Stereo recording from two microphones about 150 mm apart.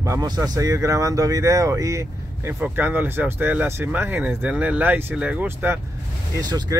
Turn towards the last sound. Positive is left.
turn(degrees=-20)  # may be behind; listen again after turning